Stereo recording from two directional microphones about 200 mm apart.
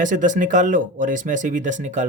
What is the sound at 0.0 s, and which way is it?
Speech, 40° right (ahead or behind).